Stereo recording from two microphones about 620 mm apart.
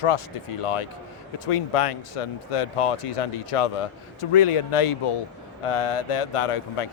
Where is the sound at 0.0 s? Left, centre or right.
Left.